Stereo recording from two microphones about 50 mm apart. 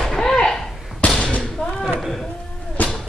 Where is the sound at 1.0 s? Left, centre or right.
Left.